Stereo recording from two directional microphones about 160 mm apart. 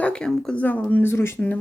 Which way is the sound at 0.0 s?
5° left (ahead or behind).